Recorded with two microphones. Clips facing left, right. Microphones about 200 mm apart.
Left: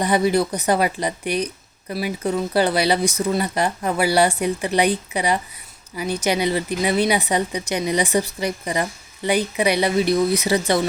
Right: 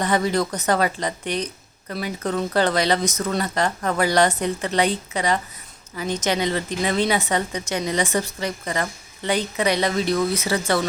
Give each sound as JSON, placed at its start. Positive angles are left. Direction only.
{"t": 0.0, "sound": "speech", "side_deg": 10}